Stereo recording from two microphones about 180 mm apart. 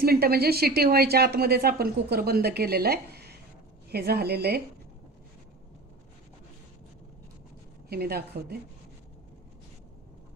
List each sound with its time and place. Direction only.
0.0 s a woman's voice: 60° right (ahead or behind)
7.9 s a woman's voice: 60° right (ahead or behind)